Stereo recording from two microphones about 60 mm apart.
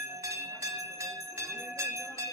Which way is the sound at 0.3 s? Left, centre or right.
Right.